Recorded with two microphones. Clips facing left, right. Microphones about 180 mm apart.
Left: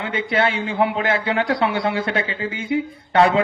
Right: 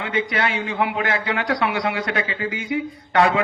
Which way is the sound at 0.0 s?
30° left (ahead or behind).